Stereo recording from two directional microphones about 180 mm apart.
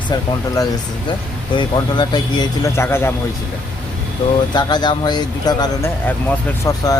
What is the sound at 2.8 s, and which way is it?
Speech, 15° left (ahead or behind).